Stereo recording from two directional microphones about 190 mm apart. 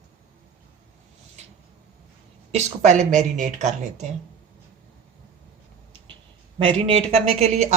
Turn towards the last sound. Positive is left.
turn(degrees=-30)  # may be behind; listen again after turning